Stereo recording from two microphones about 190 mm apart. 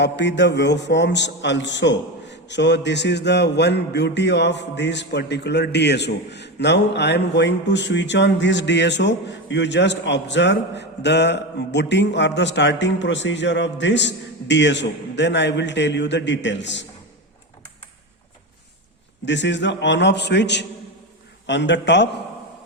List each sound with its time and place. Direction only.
0.0 s a man's voice: 65° left (ahead or behind)
19.2 s a man's voice: 70° left (ahead or behind)